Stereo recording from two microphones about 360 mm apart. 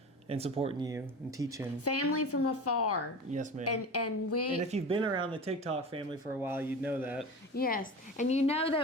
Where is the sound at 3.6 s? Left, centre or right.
Left.